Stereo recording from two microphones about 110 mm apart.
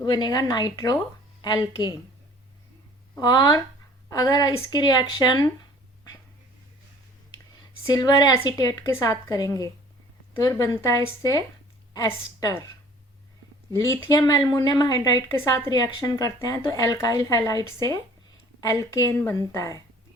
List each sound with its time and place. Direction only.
0.0 s a woman's voice: 40° left (ahead or behind)
3.2 s a woman's voice: 40° left (ahead or behind)
7.9 s a woman's voice: 35° left (ahead or behind)
14.2 s a woman's voice: 35° left (ahead or behind)